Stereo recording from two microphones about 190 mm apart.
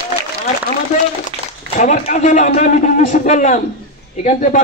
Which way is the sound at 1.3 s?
30° right (ahead or behind).